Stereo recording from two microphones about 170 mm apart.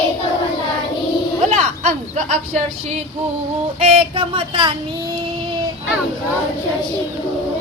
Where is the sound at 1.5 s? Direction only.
40° right (ahead or behind).